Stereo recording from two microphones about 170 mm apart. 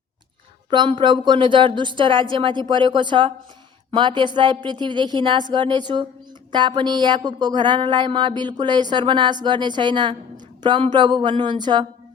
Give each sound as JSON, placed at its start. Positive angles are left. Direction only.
{"t": 0.7, "sound": "speech", "side_deg": -30}